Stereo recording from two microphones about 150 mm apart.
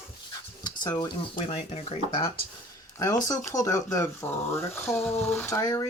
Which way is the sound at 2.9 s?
25° left (ahead or behind).